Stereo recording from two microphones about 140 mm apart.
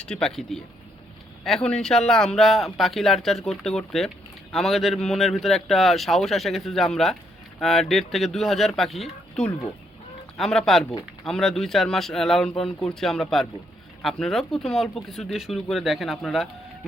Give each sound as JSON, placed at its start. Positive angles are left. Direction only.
{"t": 0.0, "sound": "speech", "side_deg": 5}